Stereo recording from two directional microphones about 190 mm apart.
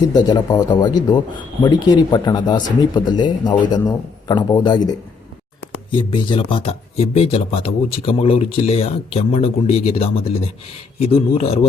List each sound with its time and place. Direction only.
0.1 s a man's voice: 20° left (ahead or behind)